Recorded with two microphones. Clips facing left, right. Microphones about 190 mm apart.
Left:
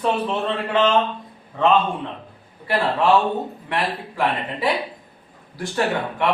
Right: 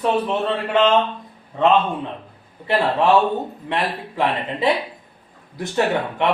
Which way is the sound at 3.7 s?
20° right (ahead or behind).